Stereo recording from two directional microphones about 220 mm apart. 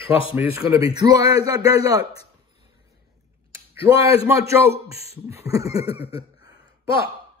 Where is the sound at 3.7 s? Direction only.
25° left (ahead or behind).